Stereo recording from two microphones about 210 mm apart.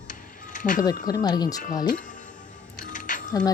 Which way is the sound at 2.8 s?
40° left (ahead or behind).